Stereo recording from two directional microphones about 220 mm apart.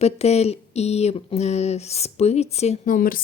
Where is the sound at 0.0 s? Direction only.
30° left (ahead or behind).